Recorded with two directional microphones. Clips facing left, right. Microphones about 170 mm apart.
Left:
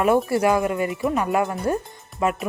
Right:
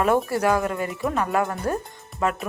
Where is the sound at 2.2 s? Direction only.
10° left (ahead or behind).